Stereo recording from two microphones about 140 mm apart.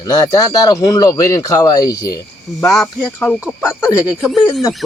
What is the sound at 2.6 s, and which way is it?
Speech, 5° left (ahead or behind).